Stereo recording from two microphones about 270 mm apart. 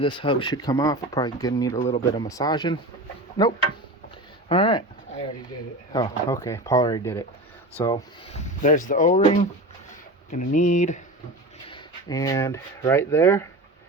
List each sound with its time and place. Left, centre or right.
0.0 s speech: centre
5.9 s speech: centre
8.3 s speech: left
11.7 s speech: centre